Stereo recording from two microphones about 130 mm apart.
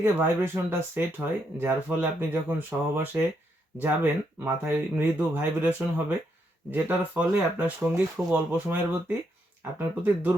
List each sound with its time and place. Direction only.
0.0 s speech: 20° right (ahead or behind)